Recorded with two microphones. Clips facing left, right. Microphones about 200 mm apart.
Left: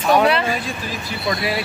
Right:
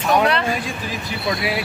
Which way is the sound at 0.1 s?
5° left (ahead or behind).